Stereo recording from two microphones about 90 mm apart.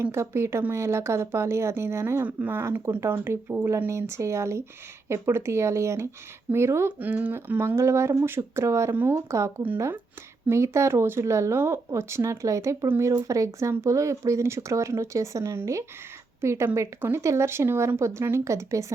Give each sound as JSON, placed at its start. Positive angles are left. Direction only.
{"t": 0.0, "sound": "speech", "side_deg": -30}
{"t": 2.2, "sound": "speech", "side_deg": -15}
{"t": 2.6, "sound": "speech", "side_deg": -30}
{"t": 7.0, "sound": "speech", "side_deg": -20}